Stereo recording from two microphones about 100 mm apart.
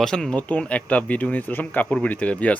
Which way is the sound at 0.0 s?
5° left (ahead or behind).